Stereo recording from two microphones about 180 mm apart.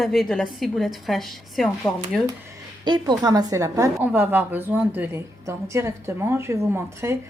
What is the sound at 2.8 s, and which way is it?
A woman's voice, 25° right (ahead or behind).